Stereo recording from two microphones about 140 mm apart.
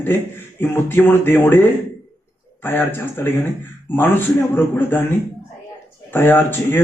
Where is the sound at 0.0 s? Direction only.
15° left (ahead or behind).